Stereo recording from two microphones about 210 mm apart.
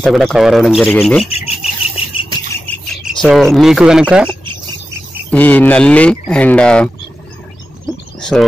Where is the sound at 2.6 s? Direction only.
5° left (ahead or behind).